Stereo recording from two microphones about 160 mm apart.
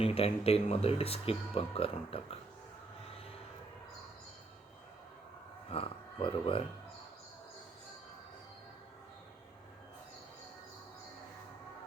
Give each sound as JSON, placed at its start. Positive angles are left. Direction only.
{"t": 0.0, "sound": "speech", "side_deg": 40}
{"t": 5.7, "sound": "speech", "side_deg": 35}